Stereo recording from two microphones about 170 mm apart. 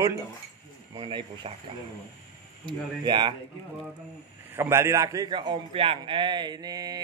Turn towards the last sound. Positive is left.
turn(degrees=-20)  # may be behind; listen again after turning